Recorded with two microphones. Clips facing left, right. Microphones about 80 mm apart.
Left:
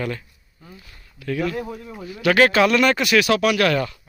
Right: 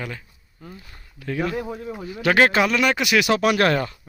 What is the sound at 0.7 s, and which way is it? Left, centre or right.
Speech, right.